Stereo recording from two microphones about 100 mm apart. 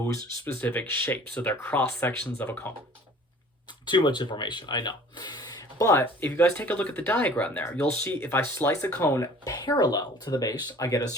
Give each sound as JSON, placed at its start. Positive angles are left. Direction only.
{"t": 0.4, "sound": "speech", "side_deg": 20}
{"t": 3.8, "sound": "speech", "side_deg": 50}
{"t": 6.0, "sound": "speech", "side_deg": 20}